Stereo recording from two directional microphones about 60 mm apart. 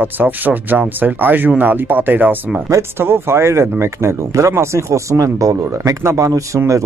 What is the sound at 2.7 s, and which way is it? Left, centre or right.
Speech, right.